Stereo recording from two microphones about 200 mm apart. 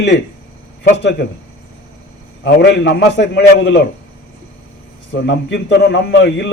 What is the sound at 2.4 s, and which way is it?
A man's voice, 60° left (ahead or behind).